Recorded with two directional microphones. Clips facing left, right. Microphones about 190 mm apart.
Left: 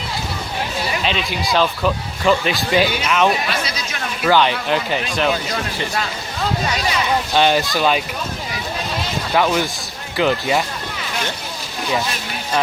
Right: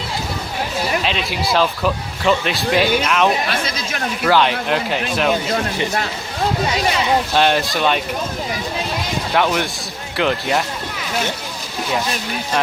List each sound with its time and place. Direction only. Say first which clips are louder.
1.0 s speech: even; centre (ahead or behind)
7.3 s speech: left 4 dB; centre (ahead or behind)
9.3 s speech: left 1 dB; centre (ahead or behind)